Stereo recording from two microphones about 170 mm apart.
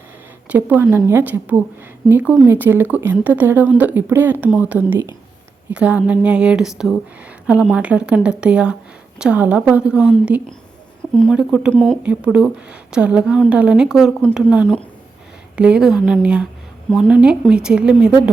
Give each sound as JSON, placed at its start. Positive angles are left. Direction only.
{"t": 0.4, "sound": "a woman's voice", "side_deg": -10}
{"t": 12.0, "sound": "a woman's voice", "side_deg": -5}
{"t": 15.5, "sound": "a woman's voice", "side_deg": -5}